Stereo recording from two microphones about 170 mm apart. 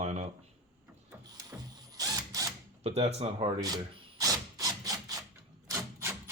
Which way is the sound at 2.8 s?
40° right (ahead or behind).